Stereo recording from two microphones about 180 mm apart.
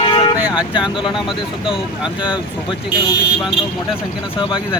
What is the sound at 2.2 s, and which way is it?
Speech, 25° left (ahead or behind).